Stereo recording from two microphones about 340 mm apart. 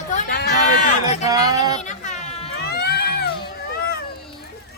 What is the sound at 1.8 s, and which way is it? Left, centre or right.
Baby cry, left.